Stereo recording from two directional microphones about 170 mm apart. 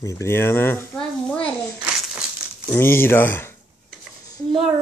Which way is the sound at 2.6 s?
15° left (ahead or behind).